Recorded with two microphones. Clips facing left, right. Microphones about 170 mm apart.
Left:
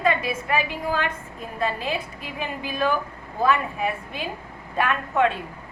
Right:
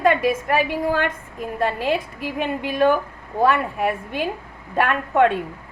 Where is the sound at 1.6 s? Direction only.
65° right (ahead or behind).